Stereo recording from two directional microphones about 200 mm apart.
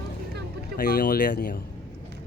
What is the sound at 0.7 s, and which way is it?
Speech, 50° left (ahead or behind).